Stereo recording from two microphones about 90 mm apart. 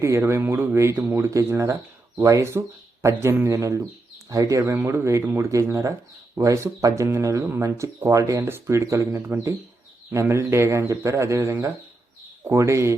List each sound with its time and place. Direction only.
0.0 s speech: 30° right (ahead or behind)
4.6 s speech: 25° right (ahead or behind)